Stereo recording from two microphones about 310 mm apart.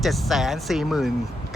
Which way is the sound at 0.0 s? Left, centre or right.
Centre.